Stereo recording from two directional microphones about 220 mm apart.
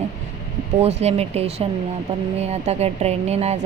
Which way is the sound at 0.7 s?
30° right (ahead or behind).